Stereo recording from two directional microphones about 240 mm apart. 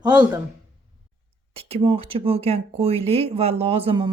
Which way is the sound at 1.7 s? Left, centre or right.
Right.